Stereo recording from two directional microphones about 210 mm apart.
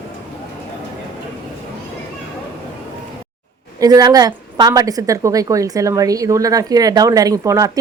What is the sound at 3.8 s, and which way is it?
A woman's voice, 15° right (ahead or behind).